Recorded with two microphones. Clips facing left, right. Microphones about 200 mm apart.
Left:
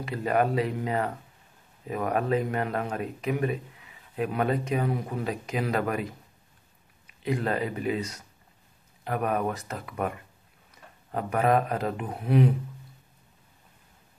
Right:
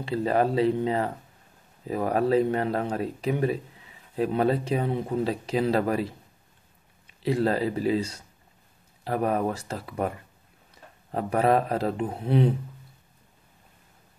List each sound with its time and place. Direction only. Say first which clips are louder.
0.0 s speech: right 2 dB; 30° right (ahead or behind)